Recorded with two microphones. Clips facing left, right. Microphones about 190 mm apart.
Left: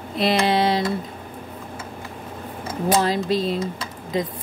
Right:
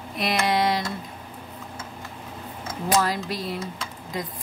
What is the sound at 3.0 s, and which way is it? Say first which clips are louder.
Speech: left 7 dB; 25° left (ahead or behind).